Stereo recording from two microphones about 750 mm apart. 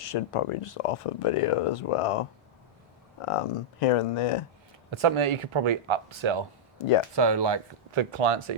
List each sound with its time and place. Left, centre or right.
0.1 s speech: left
4.9 s speech: right